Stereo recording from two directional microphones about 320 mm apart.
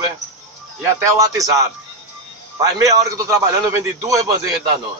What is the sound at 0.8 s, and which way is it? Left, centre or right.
A man's voice, centre.